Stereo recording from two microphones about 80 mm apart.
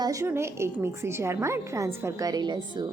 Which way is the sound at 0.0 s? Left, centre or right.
Right.